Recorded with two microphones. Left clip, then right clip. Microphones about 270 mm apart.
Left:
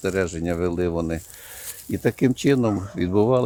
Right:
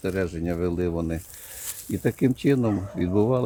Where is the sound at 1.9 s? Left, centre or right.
Left.